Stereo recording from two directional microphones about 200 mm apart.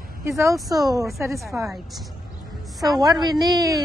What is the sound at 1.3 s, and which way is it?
Speech, centre (ahead or behind).